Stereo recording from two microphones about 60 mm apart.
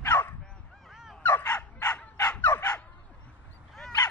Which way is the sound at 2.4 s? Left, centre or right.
Left.